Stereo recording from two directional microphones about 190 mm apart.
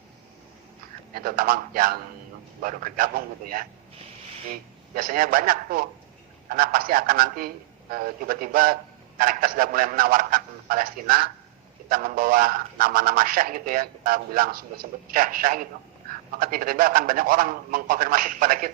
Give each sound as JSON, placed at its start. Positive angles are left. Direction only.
{"t": 1.1, "sound": "a man's voice", "side_deg": -50}
{"t": 4.9, "sound": "a man's voice", "side_deg": -50}